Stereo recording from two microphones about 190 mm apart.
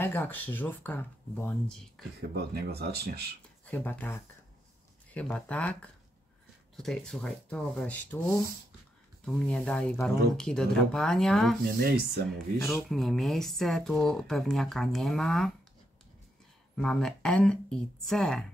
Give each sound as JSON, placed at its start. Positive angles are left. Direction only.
{"t": 0.0, "sound": "speech", "side_deg": 10}
{"t": 2.1, "sound": "speech", "side_deg": -55}
{"t": 3.6, "sound": "speech", "side_deg": 5}
{"t": 11.6, "sound": "speech", "side_deg": -55}
{"t": 12.3, "sound": "speech", "side_deg": 0}
{"t": 16.7, "sound": "speech", "side_deg": 5}